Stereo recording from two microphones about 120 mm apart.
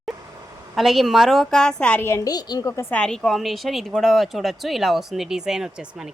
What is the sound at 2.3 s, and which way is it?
Speech, 35° left (ahead or behind).